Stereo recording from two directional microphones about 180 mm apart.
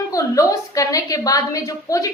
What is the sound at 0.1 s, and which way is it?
A woman's voice, 20° left (ahead or behind).